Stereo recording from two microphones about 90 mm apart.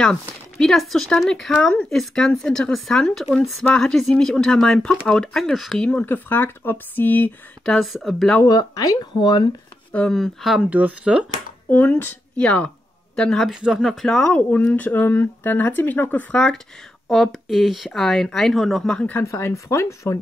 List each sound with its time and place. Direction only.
0.0 s speech: 5° left (ahead or behind)
6.0 s speech: 20° left (ahead or behind)
7.6 s speech: centre (ahead or behind)
8.5 s speech: 45° left (ahead or behind)
10.1 s speech: 5° right (ahead or behind)
10.6 s speech: 20° right (ahead or behind)
11.7 s speech: 20° left (ahead or behind)
13.5 s speech: 5° right (ahead or behind); by 16.3 s 20° left (ahead or behind)
16.3 s speech: 10° left (ahead or behind)
19.2 s speech: 35° left (ahead or behind)